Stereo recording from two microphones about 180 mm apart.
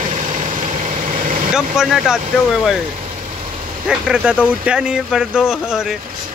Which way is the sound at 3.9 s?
5° right (ahead or behind).